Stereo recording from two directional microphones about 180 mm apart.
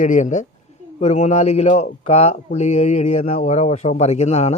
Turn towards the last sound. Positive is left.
turn(degrees=35)  # may be behind; listen again after turning